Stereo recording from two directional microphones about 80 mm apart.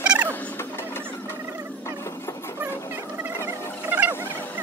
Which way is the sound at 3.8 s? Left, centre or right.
Right.